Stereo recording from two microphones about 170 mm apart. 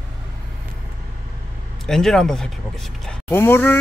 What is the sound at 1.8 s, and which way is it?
Speech, 5° left (ahead or behind).